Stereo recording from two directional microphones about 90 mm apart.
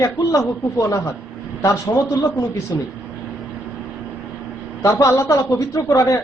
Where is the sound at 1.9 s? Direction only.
35° left (ahead or behind).